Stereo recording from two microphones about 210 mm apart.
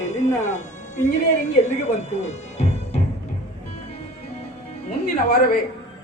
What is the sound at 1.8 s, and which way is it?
Music, 35° left (ahead or behind).